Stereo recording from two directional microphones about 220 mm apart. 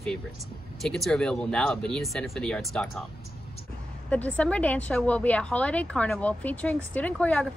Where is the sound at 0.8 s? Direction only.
Centre (ahead or behind).